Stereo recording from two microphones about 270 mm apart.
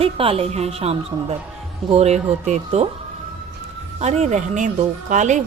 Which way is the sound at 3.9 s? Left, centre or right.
Right.